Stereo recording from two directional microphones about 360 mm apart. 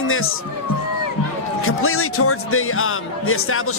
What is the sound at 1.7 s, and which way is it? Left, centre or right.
Speech, left.